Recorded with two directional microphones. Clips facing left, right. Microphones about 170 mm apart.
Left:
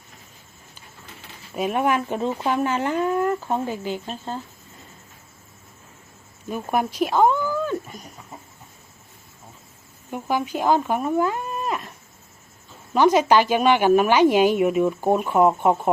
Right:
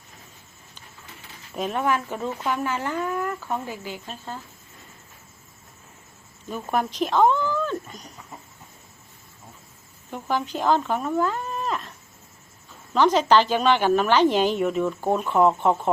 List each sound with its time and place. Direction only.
1.5 s speech: 15° left (ahead or behind)
6.5 s a woman's voice: 10° left (ahead or behind)
10.1 s a woman's voice: 10° left (ahead or behind)
12.9 s a woman's voice: 10° left (ahead or behind)